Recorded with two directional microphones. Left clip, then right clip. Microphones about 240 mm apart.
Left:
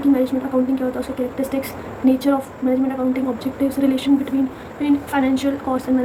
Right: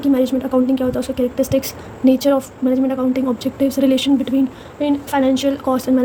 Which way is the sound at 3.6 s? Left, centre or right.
Right.